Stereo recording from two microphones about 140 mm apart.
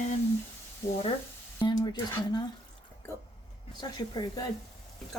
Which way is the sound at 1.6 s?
30° left (ahead or behind).